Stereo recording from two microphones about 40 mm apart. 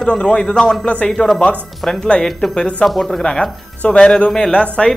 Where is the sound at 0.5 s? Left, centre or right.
Centre.